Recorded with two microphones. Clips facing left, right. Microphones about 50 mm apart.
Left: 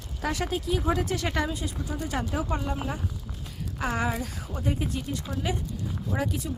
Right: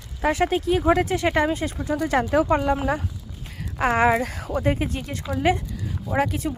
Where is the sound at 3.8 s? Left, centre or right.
Right.